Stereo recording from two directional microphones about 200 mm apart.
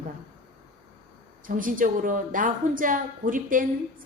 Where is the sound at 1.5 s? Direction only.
45° right (ahead or behind).